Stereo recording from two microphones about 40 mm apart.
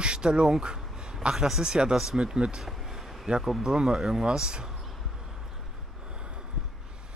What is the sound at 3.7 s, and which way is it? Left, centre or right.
Speech, centre.